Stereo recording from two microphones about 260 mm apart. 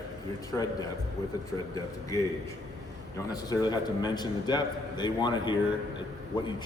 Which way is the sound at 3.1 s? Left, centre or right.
Centre.